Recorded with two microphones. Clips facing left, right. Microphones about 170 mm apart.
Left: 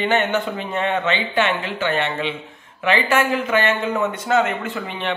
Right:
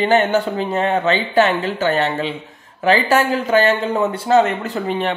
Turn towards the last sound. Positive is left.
turn(degrees=-40)  # may be behind; listen again after turning